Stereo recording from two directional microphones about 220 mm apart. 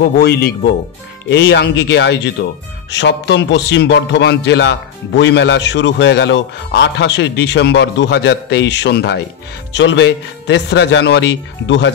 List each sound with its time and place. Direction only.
0.0 s a man's voice: 45° left (ahead or behind)